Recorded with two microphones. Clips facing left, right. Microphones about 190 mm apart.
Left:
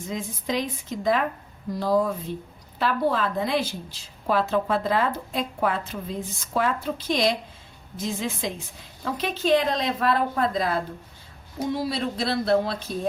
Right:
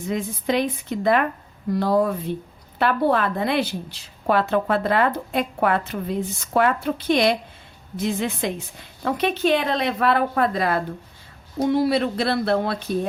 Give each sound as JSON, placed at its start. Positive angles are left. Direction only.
{"t": 0.1, "sound": "a woman's voice", "side_deg": -60}